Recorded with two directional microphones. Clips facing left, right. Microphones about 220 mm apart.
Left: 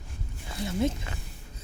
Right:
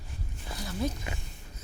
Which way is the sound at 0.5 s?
25° left (ahead or behind).